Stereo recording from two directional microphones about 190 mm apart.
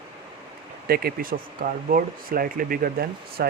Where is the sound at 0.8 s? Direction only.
55° right (ahead or behind).